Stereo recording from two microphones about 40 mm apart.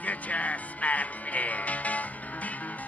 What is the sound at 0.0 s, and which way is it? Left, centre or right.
Music, left.